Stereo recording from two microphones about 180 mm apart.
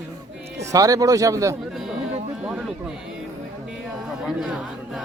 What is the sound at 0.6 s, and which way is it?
Speech, 20° right (ahead or behind).